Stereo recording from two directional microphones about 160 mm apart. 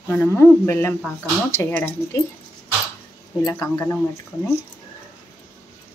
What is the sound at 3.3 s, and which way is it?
Speech, 20° left (ahead or behind).